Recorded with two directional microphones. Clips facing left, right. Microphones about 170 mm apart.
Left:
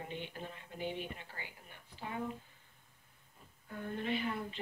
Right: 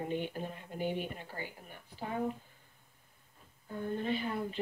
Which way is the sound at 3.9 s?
35° right (ahead or behind).